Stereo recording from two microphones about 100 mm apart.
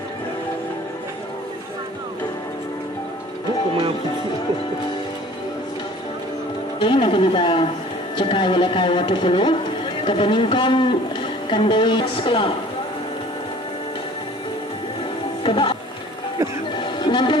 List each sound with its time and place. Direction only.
6.7 s speech: 55° left (ahead or behind)
15.4 s music: 60° left (ahead or behind)
16.7 s music: 50° left (ahead or behind)